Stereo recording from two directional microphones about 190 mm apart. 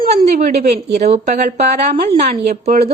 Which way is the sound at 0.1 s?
35° right (ahead or behind).